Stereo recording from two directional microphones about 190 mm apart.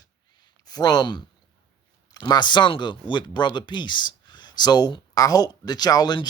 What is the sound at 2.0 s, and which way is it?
Speech, 20° left (ahead or behind).